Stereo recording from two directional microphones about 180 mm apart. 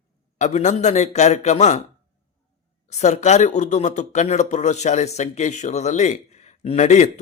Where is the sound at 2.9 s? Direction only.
40° left (ahead or behind).